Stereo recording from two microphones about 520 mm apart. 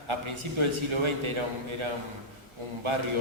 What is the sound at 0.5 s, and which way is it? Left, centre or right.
A man's voice, right.